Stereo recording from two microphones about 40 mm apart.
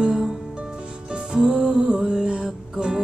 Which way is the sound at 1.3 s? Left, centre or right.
Right.